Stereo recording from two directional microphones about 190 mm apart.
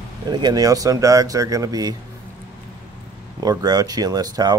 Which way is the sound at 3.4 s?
20° right (ahead or behind).